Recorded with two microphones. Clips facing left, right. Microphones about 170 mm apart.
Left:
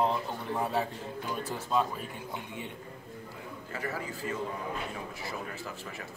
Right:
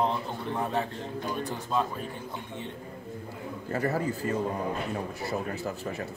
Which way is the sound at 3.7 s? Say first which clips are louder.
Right 9 dB; 40° right (ahead or behind).